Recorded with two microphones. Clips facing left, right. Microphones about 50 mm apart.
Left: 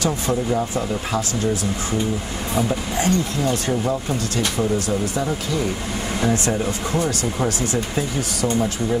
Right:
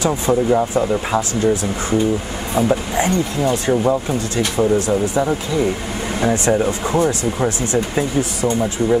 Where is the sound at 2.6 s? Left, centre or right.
Right.